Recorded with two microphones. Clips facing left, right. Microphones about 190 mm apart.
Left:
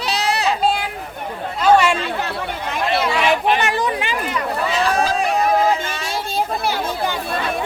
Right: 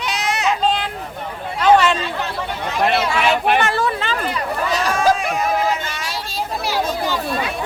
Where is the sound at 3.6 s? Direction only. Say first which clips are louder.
Even; 15° left (ahead or behind).